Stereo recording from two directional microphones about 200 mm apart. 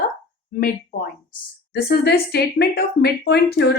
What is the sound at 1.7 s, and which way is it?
Speech, 55° left (ahead or behind).